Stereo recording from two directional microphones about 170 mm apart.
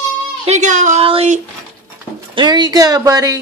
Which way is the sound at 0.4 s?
45° right (ahead or behind).